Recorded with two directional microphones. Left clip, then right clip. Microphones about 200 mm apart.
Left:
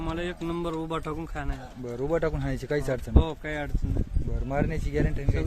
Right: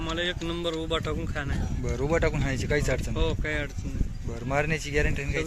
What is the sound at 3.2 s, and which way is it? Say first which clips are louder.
Speech: right 2 dB; 60° left (ahead or behind).